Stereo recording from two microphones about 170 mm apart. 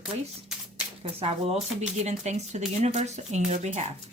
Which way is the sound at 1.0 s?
35° right (ahead or behind).